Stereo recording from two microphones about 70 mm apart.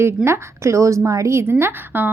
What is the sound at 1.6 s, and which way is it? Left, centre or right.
Speech, right.